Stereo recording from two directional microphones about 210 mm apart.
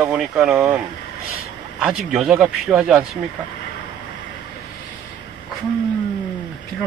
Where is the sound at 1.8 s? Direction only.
5° right (ahead or behind).